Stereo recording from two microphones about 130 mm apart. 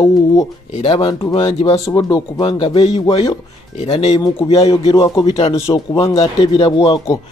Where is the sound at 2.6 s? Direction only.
40° left (ahead or behind).